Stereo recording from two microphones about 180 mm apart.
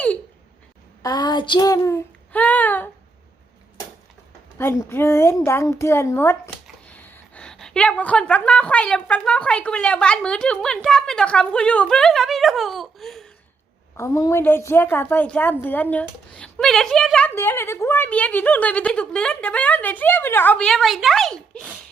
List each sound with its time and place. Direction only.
1.0 s speech: 20° left (ahead or behind)
4.5 s a woman's voice: 15° left (ahead or behind)
13.9 s a woman's voice: 15° left (ahead or behind)